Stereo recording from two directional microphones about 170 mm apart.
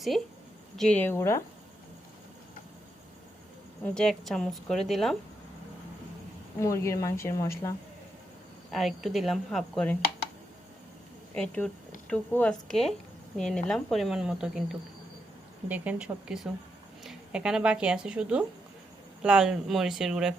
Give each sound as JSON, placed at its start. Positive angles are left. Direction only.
{"t": 0.8, "sound": "speech", "side_deg": 10}
{"t": 3.9, "sound": "a woman's voice", "side_deg": 0}
{"t": 6.6, "sound": "speech", "side_deg": 20}
{"t": 8.7, "sound": "a woman's voice", "side_deg": 0}
{"t": 11.3, "sound": "a woman's voice", "side_deg": 5}